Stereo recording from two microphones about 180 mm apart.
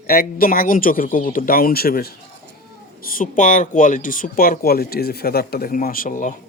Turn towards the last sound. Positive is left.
turn(degrees=50)  # may be behind; listen again after turning